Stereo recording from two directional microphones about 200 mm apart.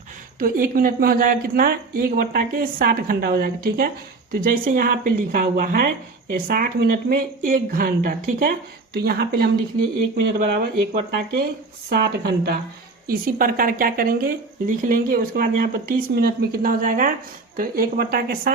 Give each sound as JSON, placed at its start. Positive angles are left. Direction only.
{"t": 0.3, "sound": "speech", "side_deg": -45}